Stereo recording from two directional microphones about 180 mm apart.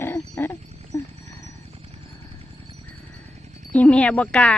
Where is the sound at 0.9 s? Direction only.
15° left (ahead or behind).